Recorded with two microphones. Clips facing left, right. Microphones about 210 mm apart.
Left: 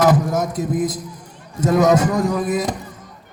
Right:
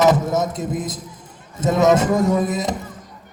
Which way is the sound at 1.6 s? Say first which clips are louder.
Left 1 dB; 25° right (ahead or behind).